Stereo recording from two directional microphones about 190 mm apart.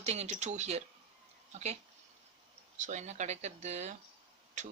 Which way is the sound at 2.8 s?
40° right (ahead or behind).